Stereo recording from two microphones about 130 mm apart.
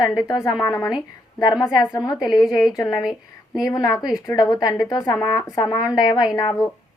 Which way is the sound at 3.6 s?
30° left (ahead or behind).